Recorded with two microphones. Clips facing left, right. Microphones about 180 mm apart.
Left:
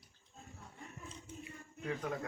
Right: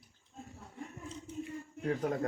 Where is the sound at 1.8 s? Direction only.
40° right (ahead or behind).